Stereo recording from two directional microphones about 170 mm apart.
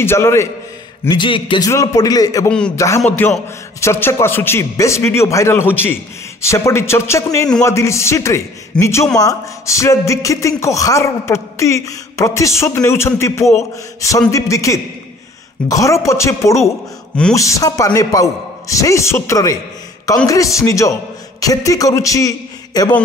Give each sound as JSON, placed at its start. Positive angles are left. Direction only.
{"t": 0.0, "sound": "speech", "side_deg": 15}
{"t": 1.0, "sound": "a man's voice", "side_deg": 30}
{"t": 1.7, "sound": "a man's voice", "side_deg": 20}